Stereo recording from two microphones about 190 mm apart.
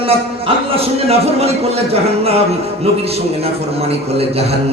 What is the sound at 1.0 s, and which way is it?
Speech, 30° right (ahead or behind).